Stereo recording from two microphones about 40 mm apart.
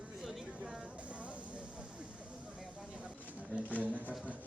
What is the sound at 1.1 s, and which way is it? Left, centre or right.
Vehicle, right.